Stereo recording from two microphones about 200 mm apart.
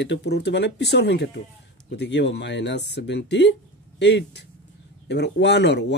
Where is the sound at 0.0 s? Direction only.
60° left (ahead or behind).